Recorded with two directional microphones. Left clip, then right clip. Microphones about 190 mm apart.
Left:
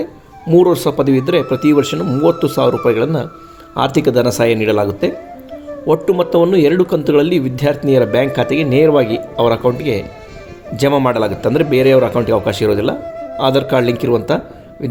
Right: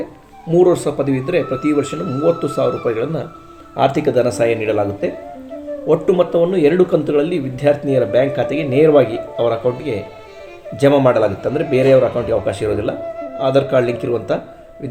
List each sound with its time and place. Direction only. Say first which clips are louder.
0.5 s a man's voice: left 2 dB; 40° left (ahead or behind)